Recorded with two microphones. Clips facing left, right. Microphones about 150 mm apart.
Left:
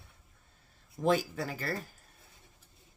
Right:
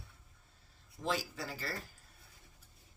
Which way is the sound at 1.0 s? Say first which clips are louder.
Left 8 dB; 55° left (ahead or behind).